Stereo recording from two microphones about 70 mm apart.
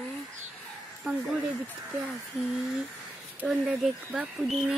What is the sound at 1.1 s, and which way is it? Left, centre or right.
Speech, centre.